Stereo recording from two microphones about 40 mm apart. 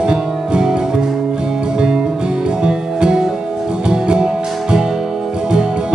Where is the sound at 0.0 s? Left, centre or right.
Right.